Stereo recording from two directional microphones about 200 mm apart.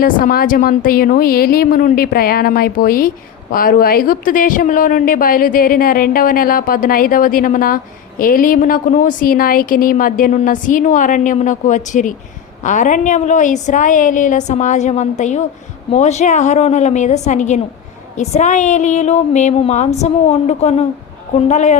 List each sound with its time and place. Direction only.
0.0 s a woman's voice: 45° left (ahead or behind)